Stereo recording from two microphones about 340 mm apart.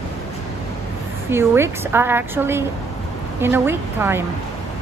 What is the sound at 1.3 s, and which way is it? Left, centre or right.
Speech, centre.